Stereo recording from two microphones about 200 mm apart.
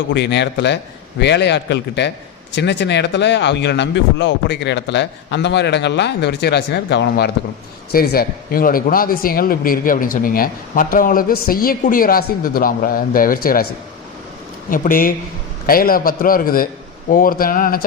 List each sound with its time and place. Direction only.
0.1 s a man's voice: 60° left (ahead or behind)
14.7 s a man's voice: 45° left (ahead or behind)